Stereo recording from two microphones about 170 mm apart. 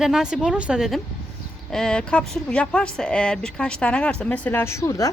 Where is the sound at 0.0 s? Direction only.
5° right (ahead or behind).